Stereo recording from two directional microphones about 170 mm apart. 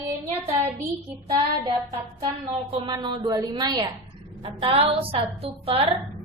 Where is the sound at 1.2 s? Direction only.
20° right (ahead or behind).